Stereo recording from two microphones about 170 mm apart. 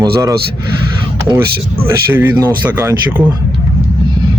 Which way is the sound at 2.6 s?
10° right (ahead or behind).